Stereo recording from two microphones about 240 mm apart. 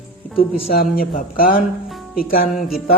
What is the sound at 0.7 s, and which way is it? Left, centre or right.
Speech, left.